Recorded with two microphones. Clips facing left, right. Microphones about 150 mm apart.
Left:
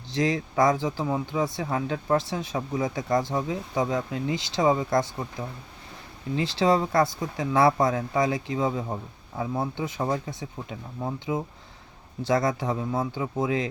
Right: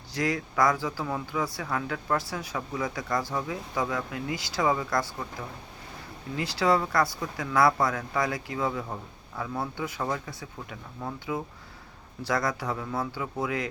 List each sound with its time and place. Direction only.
0.1 s speech: 25° left (ahead or behind)
6.3 s speech: 25° left (ahead or behind)